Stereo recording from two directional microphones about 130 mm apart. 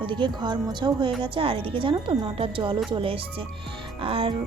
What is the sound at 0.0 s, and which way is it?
A woman's voice, 40° right (ahead or behind).